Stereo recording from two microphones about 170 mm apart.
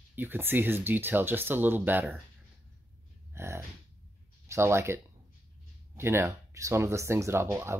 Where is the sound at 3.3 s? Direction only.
15° right (ahead or behind).